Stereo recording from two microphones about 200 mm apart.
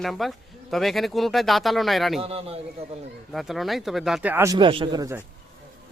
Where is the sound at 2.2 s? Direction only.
30° right (ahead or behind).